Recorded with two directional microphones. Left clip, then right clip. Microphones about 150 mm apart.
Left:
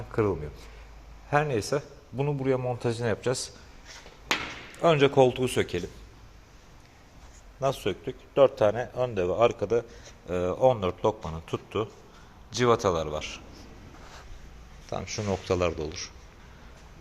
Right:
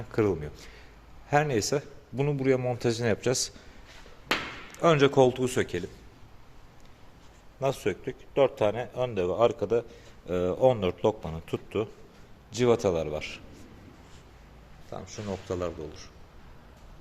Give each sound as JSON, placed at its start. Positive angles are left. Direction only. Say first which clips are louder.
{"t": 0.1, "sound": "a man's voice", "louder": "even", "side_deg": -30}
{"t": 4.8, "sound": "a man's voice", "louder": "even", "side_deg": -20}
{"t": 7.6, "sound": "a man's voice", "louder": "left 1 dB", "side_deg": -15}
{"t": 10.2, "sound": "a man's voice", "louder": "even", "side_deg": -35}
{"t": 14.8, "sound": "speech", "louder": "left 6 dB", "side_deg": 20}